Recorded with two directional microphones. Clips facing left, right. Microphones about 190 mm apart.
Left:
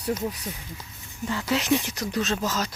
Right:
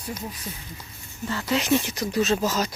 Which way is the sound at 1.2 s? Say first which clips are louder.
Left 1 dB; 15° left (ahead or behind).